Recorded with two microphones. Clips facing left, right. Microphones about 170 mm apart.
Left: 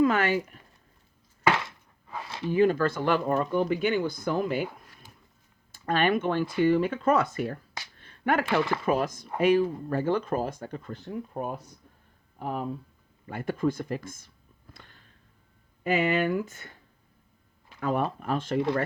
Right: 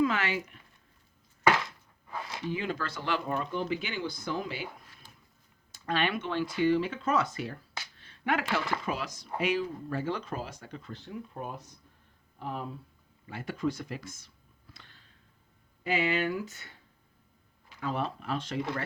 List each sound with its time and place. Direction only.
0.0 s speech: 50° left (ahead or behind)
1.6 s a sound: 25° left (ahead or behind)
2.5 s speech: 50° left (ahead or behind)
14.7 s a sound: 50° left (ahead or behind)
15.8 s speech: 50° left (ahead or behind)
17.7 s speech: 50° left (ahead or behind)